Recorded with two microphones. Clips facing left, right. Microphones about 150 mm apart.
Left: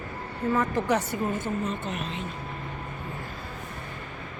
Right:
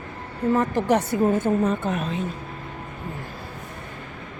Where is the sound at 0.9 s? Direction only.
55° right (ahead or behind).